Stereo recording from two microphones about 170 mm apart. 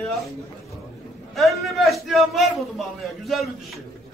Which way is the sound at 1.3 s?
Centre (ahead or behind).